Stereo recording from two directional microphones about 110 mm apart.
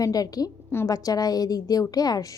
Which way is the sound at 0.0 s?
35° left (ahead or behind).